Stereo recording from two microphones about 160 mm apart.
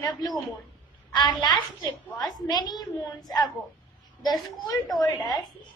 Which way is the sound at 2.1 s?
25° left (ahead or behind).